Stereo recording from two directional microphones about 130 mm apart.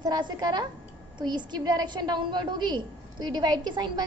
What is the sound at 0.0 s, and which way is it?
A woman's voice, 30° right (ahead or behind).